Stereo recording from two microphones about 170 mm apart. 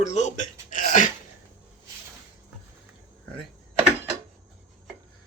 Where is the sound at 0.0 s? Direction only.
45° left (ahead or behind).